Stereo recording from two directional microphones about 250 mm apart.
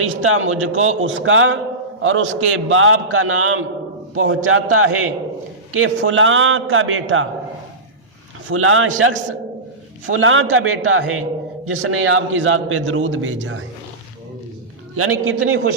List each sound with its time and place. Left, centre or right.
0.0 s a man's voice: right
8.4 s a man's voice: right
15.2 s a man's voice: right